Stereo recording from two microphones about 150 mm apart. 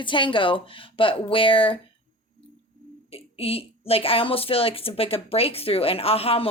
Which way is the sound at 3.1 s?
40° left (ahead or behind).